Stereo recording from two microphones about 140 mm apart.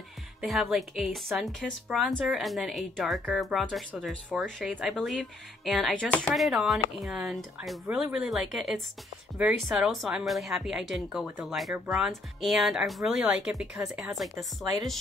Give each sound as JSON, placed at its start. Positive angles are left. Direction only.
{"t": 0.4, "sound": "speech", "side_deg": 0}